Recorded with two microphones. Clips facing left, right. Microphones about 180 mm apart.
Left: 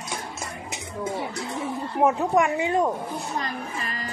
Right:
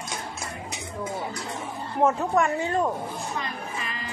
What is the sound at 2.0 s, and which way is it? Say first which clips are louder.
Speech: left 1 dB; 15° left (ahead or behind).